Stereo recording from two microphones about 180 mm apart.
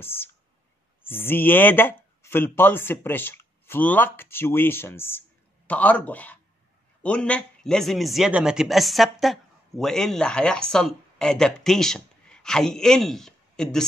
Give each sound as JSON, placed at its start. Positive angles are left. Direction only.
{"t": 0.0, "sound": "a man's voice", "side_deg": 10}